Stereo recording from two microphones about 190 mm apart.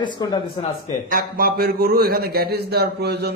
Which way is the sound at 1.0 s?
50° right (ahead or behind).